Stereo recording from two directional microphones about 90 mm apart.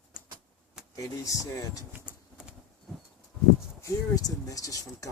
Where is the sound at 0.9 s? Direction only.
40° left (ahead or behind).